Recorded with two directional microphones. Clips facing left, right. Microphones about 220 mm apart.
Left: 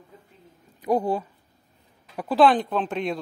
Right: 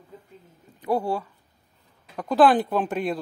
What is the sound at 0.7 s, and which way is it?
Speech, 15° left (ahead or behind).